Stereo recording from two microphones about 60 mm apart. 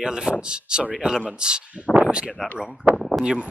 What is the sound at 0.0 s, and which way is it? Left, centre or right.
Speech, centre.